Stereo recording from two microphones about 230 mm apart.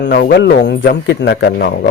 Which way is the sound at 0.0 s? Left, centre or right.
Left.